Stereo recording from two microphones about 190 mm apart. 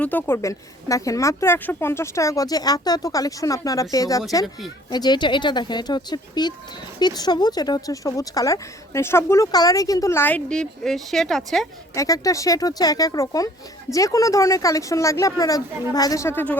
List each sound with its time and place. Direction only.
0.0 s a woman's voice: 10° left (ahead or behind)
11.9 s a woman's voice: 20° left (ahead or behind)